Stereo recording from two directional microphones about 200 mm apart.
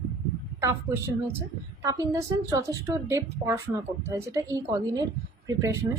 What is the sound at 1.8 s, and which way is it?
A woman's voice, 15° right (ahead or behind).